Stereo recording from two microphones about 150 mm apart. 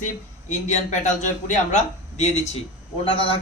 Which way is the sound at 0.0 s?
55° left (ahead or behind).